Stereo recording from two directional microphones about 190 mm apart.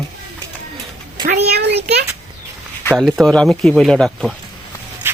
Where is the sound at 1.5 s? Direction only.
60° right (ahead or behind).